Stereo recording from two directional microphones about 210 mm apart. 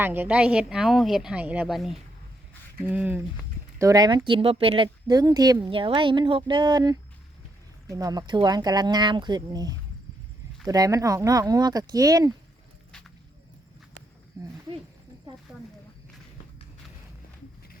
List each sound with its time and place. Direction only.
0.0 s a woman's voice: 10° right (ahead or behind)
14.4 s speech: 15° right (ahead or behind)